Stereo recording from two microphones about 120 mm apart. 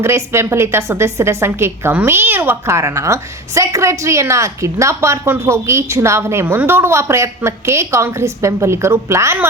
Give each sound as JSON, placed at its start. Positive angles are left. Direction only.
{"t": 0.0, "sound": "a woman's voice", "side_deg": -20}